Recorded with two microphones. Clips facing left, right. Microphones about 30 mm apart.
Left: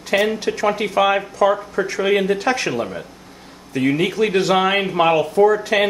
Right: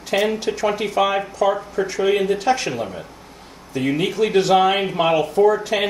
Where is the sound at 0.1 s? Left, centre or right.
Centre.